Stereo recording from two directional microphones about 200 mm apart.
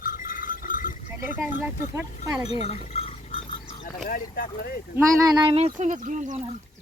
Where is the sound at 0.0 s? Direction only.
45° left (ahead or behind).